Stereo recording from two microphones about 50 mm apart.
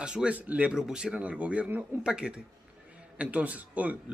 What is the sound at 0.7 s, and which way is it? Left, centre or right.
Speech, centre.